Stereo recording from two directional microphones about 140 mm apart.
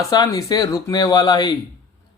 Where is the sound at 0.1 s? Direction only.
25° left (ahead or behind).